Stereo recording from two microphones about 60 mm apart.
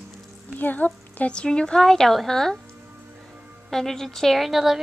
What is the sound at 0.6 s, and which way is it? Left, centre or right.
A woman's voice, left.